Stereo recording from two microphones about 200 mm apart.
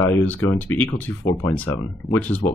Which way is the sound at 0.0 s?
10° left (ahead or behind).